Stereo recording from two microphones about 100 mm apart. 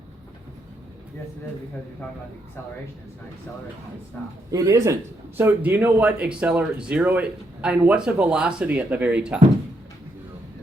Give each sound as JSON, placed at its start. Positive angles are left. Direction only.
{"t": 4.5, "sound": "a man's voice", "side_deg": -35}
{"t": 5.4, "sound": "speech", "side_deg": -20}